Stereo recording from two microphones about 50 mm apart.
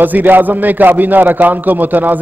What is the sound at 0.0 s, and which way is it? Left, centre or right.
Speech, right.